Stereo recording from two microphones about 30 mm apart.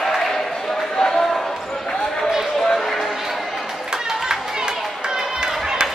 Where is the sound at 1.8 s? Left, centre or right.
Centre.